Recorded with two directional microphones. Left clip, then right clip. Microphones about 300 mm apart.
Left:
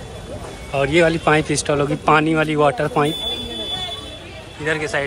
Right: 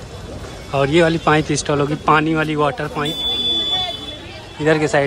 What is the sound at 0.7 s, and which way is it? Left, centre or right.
Speech, centre.